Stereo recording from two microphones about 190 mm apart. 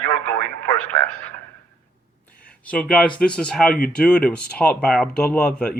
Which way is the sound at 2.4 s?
5° left (ahead or behind).